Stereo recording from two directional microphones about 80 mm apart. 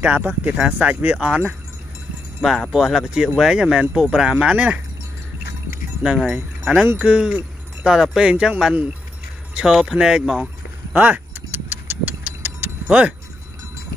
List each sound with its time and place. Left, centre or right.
0.0 s speech: centre
2.7 s speech: centre
6.2 s speech: centre
10.9 s vehicle: right